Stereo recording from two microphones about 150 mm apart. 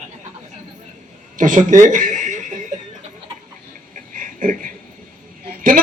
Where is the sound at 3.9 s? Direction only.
60° right (ahead or behind).